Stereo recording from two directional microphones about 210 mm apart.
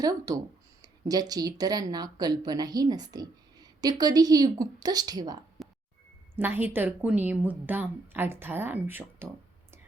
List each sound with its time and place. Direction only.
0.0 s a woman's voice: 15° right (ahead or behind)
5.6 s plop: centre (ahead or behind)
6.3 s a woman's voice: 10° right (ahead or behind)